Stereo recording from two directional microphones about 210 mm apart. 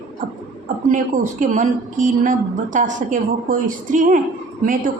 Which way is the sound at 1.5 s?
40° right (ahead or behind).